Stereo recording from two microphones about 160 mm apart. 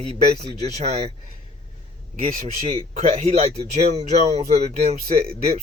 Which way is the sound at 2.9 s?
40° right (ahead or behind).